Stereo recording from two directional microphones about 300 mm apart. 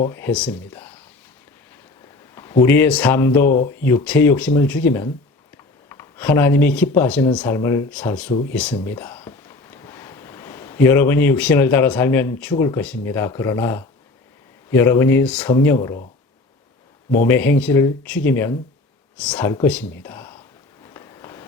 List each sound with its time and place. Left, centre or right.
0.1 s speech: centre
2.3 s a man's voice: centre
3.4 s speech: left
3.7 s speech: centre
17.2 s speech: centre
20.8 s a sound: centre